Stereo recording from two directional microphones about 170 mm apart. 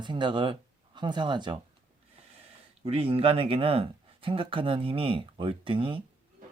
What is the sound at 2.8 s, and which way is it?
Speech, 35° right (ahead or behind).